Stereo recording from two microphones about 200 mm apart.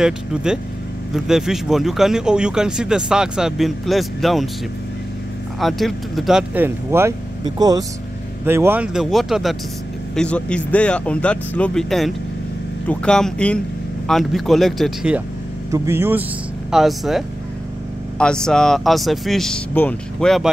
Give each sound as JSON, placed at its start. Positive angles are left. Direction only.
{"t": 0.0, "sound": "speech", "side_deg": -5}
{"t": 5.6, "sound": "speech", "side_deg": 0}
{"t": 15.7, "sound": "speech", "side_deg": -15}
{"t": 16.7, "sound": "speech", "side_deg": 0}